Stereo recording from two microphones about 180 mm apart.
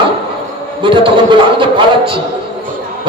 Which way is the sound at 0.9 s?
25° right (ahead or behind).